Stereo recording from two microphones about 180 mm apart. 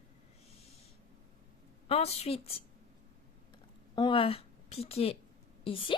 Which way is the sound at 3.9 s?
25° left (ahead or behind).